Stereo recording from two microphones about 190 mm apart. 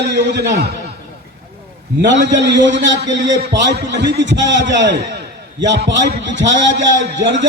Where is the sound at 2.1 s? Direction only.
65° right (ahead or behind).